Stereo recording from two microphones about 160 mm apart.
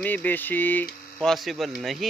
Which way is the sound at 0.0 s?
10° left (ahead or behind).